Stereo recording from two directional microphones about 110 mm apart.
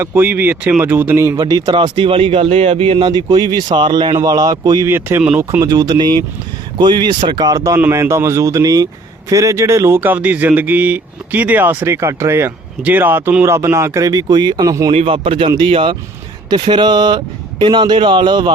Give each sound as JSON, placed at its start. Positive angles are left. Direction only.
{"t": 0.0, "sound": "speech", "side_deg": -20}
{"t": 4.9, "sound": "speech", "side_deg": -20}
{"t": 7.4, "sound": "speech", "side_deg": -30}
{"t": 14.9, "sound": "speech", "side_deg": -55}